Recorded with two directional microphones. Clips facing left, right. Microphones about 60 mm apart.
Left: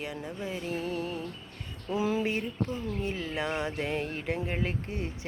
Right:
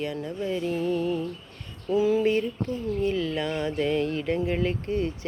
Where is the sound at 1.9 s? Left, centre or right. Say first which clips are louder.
Right 7 dB; left.